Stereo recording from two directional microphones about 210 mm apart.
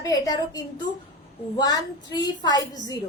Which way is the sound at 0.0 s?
15° left (ahead or behind).